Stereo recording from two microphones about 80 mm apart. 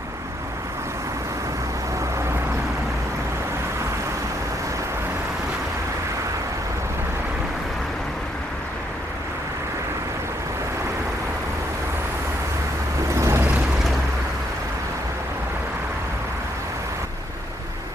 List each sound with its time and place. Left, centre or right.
13.1 s vehicle: right